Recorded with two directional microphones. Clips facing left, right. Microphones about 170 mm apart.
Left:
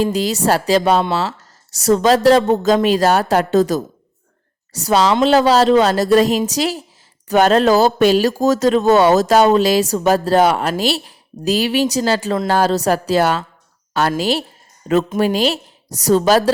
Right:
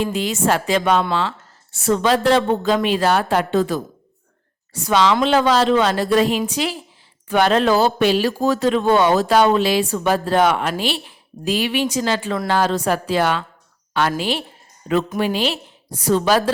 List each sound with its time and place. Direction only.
0.0 s a woman's voice: 40° left (ahead or behind)